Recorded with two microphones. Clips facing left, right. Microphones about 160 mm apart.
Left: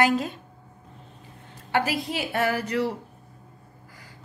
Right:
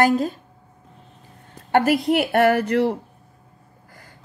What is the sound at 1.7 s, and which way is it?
A woman's voice, 55° right (ahead or behind).